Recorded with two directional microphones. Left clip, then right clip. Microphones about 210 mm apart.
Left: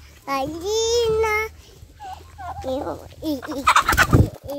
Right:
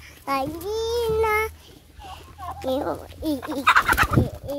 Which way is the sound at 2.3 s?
20° left (ahead or behind).